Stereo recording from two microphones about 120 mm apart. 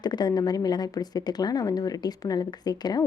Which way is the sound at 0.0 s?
35° left (ahead or behind).